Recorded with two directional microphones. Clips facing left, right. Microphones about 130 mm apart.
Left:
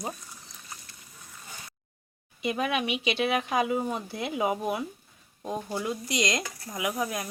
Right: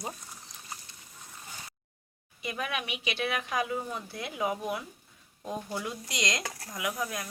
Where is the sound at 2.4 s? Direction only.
25° left (ahead or behind).